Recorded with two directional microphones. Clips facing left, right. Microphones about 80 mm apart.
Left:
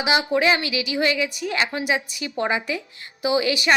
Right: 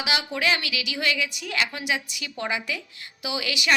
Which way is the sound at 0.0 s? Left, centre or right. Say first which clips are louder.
Left 6 dB; left.